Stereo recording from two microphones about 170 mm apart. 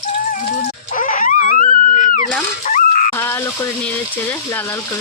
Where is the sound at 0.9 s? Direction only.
50° left (ahead or behind).